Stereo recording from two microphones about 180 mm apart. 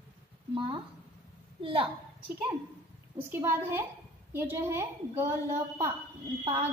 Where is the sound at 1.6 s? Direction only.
30° right (ahead or behind).